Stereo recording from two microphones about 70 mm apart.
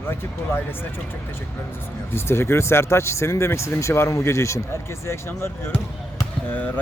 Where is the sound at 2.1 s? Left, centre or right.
Left.